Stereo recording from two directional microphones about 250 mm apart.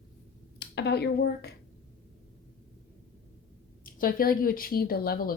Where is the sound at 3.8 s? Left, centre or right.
Left.